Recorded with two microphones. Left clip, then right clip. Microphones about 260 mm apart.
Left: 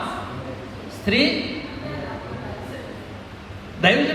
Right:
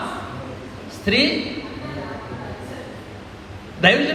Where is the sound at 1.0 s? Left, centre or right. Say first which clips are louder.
Right 1 dB; right.